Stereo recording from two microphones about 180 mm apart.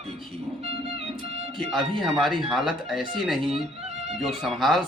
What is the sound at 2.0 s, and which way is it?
Speech, centre (ahead or behind).